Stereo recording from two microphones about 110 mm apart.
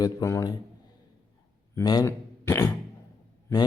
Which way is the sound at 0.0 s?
30° left (ahead or behind).